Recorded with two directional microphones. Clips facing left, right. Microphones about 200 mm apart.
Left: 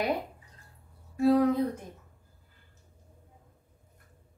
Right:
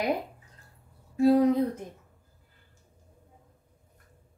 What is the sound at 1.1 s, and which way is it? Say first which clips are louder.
Speech: right 2 dB; 20° right (ahead or behind).